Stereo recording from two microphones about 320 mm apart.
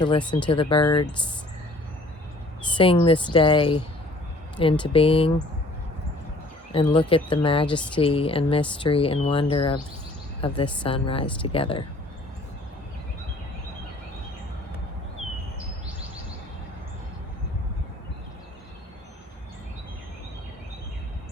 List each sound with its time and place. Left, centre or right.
0.3 s speech: centre
2.7 s speech: centre
6.7 s speech: centre